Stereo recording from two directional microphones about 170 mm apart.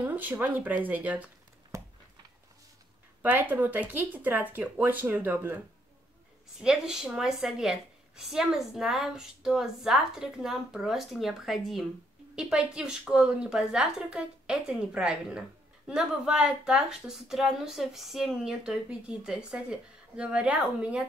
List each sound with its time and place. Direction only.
0.0 s speech: 10° right (ahead or behind)
1.7 s a sound: 20° right (ahead or behind)
3.2 s speech: 10° right (ahead or behind)
6.6 s speech: 5° right (ahead or behind)